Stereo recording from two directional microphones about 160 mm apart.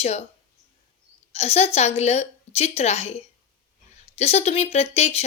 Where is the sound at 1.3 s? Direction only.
40° left (ahead or behind).